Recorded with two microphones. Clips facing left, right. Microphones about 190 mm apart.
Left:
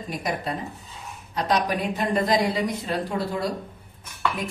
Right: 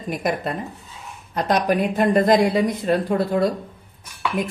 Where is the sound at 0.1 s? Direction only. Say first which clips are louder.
Right 5 dB; 55° right (ahead or behind).